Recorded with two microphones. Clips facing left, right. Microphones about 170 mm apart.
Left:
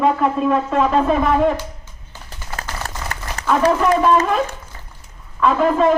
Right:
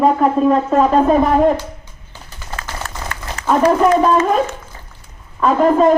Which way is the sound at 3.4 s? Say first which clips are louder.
Right 2 dB; 35° left (ahead or behind).